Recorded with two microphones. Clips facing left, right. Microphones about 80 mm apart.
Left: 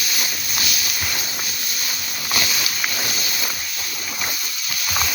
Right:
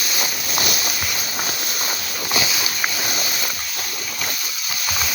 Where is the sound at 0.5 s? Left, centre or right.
Right.